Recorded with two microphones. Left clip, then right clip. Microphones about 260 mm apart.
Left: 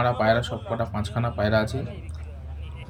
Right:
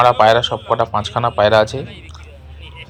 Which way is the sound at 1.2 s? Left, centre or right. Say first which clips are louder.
Right 11 dB; centre.